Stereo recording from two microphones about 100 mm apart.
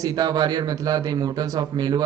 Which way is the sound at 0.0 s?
40° right (ahead or behind).